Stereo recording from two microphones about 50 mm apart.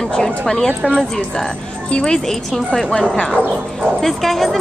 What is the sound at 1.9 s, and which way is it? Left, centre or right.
A woman's voice, centre.